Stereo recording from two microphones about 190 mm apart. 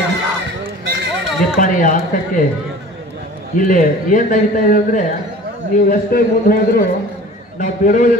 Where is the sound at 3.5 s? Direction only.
45° left (ahead or behind).